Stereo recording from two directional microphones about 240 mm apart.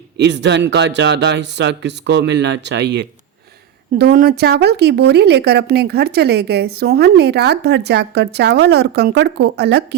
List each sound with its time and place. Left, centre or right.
0.2 s a woman's voice: right